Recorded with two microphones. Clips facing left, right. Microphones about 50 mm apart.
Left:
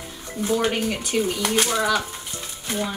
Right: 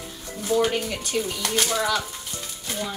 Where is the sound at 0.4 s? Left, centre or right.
Left.